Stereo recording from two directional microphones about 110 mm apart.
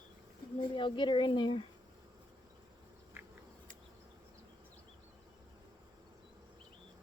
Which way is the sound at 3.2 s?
20° right (ahead or behind).